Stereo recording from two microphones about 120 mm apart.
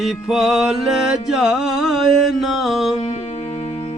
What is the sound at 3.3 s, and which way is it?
Music, 55° left (ahead or behind).